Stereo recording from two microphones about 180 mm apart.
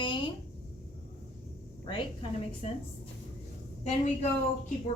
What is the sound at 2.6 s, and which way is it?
Speech, 35° left (ahead or behind).